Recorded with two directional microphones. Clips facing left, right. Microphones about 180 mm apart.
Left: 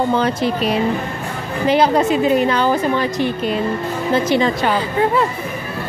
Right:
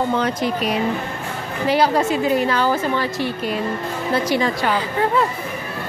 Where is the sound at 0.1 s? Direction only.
30° left (ahead or behind).